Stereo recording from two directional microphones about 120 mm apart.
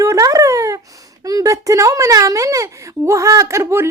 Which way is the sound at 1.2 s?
30° right (ahead or behind).